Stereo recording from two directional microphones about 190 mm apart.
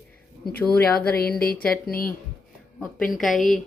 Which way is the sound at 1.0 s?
55° left (ahead or behind).